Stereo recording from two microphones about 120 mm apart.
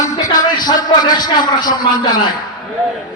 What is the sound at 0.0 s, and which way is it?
Speech, 30° left (ahead or behind).